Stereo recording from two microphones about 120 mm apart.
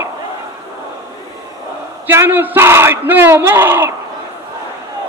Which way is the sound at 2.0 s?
20° right (ahead or behind).